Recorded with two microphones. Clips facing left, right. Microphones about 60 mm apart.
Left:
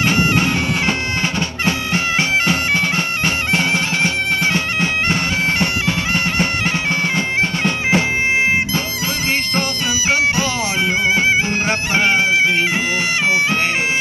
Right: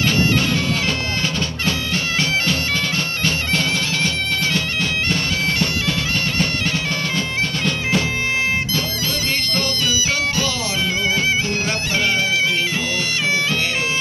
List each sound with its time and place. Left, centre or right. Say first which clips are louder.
0.0 s bagpipes: left 2 dB; left
11.1 s music: left 4 dB; left